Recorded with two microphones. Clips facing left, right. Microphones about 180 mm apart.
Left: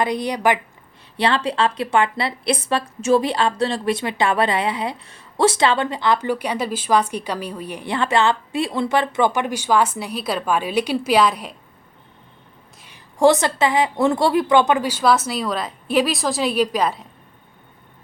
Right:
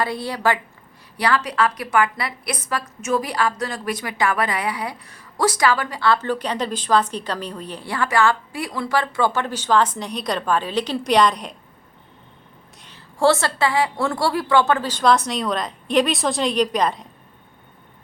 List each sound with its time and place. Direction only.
0.0 s a woman's voice: 20° left (ahead or behind)
12.8 s a woman's voice: 15° left (ahead or behind)